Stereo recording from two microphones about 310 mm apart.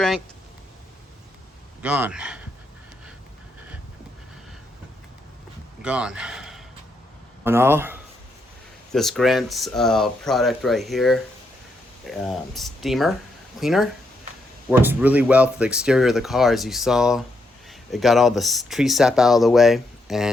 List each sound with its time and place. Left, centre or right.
1.8 s speech: centre
5.8 s a man's voice: centre